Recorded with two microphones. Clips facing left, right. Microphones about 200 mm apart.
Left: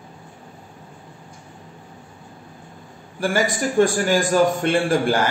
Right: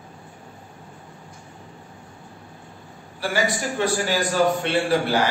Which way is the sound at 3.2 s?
50° left (ahead or behind).